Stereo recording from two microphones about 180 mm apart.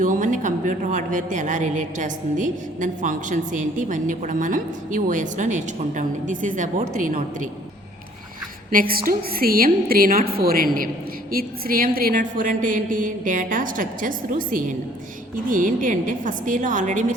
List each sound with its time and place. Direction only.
0.0 s a woman's voice: 45° right (ahead or behind)
8.7 s a woman's voice: 55° right (ahead or behind)